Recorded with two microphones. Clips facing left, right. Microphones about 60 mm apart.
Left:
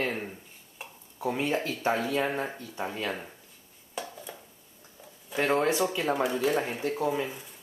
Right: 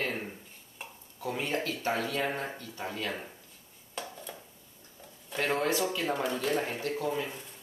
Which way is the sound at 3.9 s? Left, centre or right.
Centre.